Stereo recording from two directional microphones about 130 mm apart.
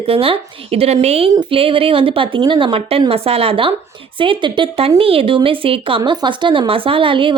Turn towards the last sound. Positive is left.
turn(degrees=-40)  # may be behind; listen again after turning